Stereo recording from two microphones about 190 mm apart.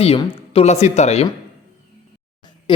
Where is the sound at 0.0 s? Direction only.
30° left (ahead or behind).